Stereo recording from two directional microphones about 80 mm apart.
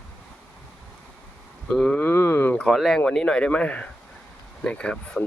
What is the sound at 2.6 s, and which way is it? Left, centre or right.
Speech, centre.